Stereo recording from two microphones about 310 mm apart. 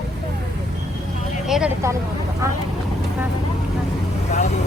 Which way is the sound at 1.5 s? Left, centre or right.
Centre.